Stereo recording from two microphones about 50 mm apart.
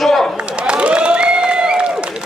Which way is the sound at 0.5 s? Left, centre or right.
Right.